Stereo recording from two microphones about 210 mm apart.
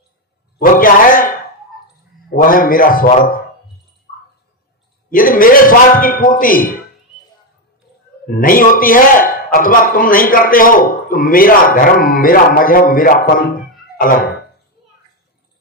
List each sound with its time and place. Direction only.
0.6 s a man's voice: 40° left (ahead or behind)
5.1 s speech: 40° left (ahead or behind)
8.3 s speech: 40° left (ahead or behind)